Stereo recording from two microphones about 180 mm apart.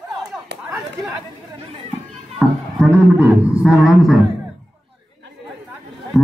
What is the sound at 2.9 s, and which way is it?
A man's voice, 10° right (ahead or behind).